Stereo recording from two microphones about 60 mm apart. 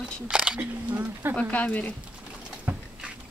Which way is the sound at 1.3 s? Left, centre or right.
Left.